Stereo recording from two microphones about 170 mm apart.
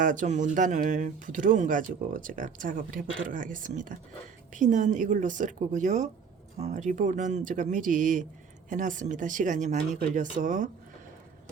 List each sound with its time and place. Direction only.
0.0 s speech: 50° right (ahead or behind)